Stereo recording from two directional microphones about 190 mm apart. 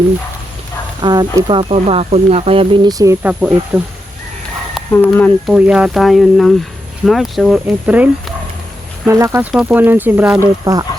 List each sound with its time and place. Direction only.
1.0 s speech: 20° right (ahead or behind)
3.7 s speech: 5° right (ahead or behind)
4.9 s speech: 5° left (ahead or behind)
5.5 s speech: 5° right (ahead or behind)
10.6 s speech: 20° right (ahead or behind)